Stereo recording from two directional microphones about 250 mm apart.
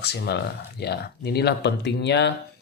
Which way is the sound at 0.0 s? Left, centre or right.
Left.